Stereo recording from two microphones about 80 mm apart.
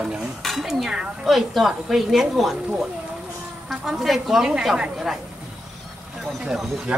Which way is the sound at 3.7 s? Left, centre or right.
Centre.